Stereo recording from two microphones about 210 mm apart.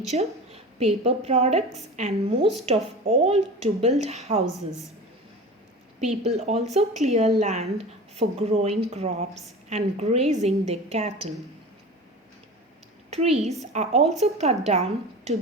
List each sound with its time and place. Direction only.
0.1 s a woman's voice: 30° right (ahead or behind)
6.0 s a woman's voice: 30° right (ahead or behind)
13.1 s a woman's voice: 30° right (ahead or behind)